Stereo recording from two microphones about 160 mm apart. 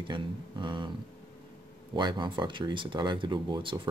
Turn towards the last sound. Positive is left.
turn(degrees=-30)  # may be behind; listen again after turning